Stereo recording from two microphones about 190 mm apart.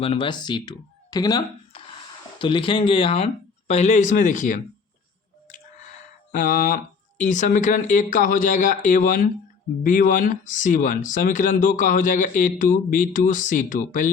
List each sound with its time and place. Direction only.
0.0 s speech: 30° left (ahead or behind)
5.5 s a sound: 45° left (ahead or behind)
7.2 s speech: 40° left (ahead or behind)